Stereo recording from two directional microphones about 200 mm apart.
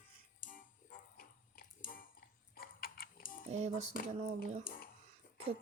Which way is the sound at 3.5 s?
35° right (ahead or behind).